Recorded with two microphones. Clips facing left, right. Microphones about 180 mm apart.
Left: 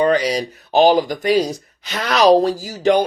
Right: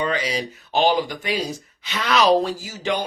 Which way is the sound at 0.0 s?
45° left (ahead or behind).